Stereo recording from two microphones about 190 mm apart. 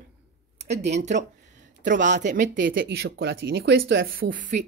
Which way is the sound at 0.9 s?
40° right (ahead or behind).